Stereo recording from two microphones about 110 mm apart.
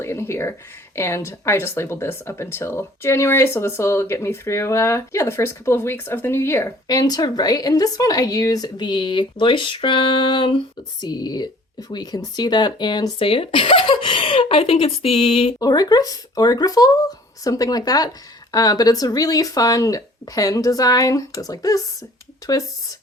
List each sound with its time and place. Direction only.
0.0 s speech: 25° left (ahead or behind)
6.8 s speech: 35° left (ahead or behind)
11.0 s speech: 40° left (ahead or behind); by 15.5 s 55° left (ahead or behind)
15.5 s speech: 35° left (ahead or behind)